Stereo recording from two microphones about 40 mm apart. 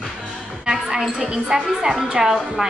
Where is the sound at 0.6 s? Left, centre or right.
Centre.